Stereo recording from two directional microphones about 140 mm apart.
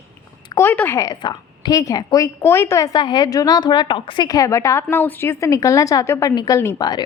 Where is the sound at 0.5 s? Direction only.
15° left (ahead or behind).